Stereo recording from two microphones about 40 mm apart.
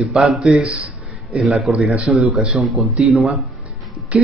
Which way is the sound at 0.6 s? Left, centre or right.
Right.